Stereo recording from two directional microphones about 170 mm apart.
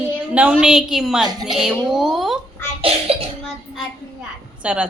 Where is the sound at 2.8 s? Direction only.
35° right (ahead or behind).